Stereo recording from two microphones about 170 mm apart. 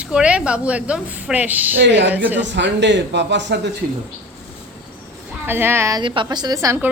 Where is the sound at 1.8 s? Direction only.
90° right.